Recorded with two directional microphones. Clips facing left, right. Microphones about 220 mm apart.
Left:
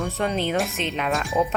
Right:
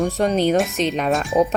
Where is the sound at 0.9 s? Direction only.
40° right (ahead or behind).